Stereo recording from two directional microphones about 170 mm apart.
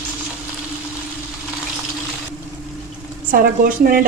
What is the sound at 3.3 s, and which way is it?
Speech, 55° right (ahead or behind).